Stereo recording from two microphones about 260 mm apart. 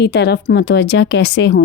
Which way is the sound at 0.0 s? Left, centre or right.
Left.